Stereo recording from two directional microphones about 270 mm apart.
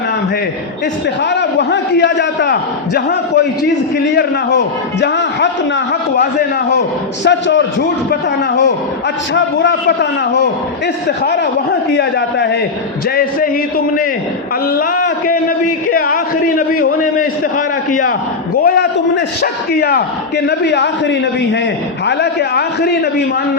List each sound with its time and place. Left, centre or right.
1.2 s a man's voice: left
7.3 s a man's voice: left
9.3 s a man's voice: left
11.9 s a man's voice: left
15.3 s a man's voice: left
18.6 s a man's voice: left